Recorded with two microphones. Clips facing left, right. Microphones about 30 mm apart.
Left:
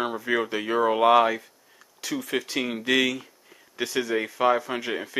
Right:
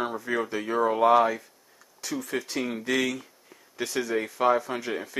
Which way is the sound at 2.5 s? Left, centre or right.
Left.